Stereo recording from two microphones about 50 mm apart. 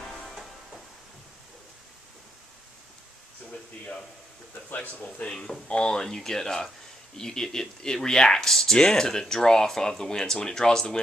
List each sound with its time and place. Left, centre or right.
4.7 s speech: left
5.3 s speech: centre